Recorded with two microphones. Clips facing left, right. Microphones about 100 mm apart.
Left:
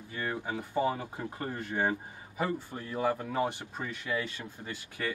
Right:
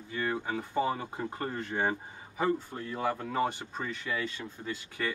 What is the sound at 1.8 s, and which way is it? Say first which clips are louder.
Speech: left 1 dB; 20° right (ahead or behind).